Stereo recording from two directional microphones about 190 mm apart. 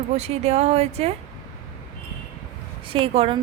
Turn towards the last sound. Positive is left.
turn(degrees=-30)  # may be behind; listen again after turning